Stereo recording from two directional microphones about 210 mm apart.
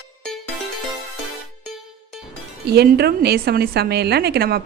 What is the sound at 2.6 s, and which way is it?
A woman's voice, 50° right (ahead or behind).